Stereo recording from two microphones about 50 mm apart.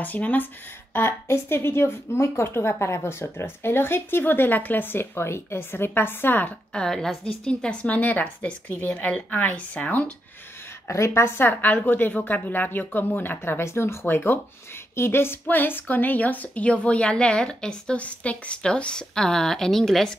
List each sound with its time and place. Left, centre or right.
0.0 s a woman's voice: left
1.5 s a woman's voice: left
6.7 s speech: centre
7.8 s a woman's voice: left
10.9 s a woman's voice: left
11.4 s a woman's voice: left
15.4 s a woman's voice: left; by 17.9 s centre
17.9 s a woman's voice: left; by 20.2 s centre